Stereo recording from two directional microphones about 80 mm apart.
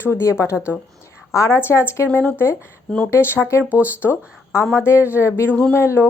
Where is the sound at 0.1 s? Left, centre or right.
Left.